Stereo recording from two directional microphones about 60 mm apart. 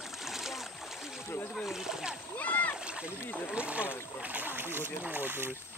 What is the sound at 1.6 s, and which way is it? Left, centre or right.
Splash, centre.